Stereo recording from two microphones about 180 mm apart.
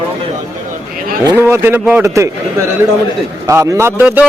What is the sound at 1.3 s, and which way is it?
Speech, 15° right (ahead or behind).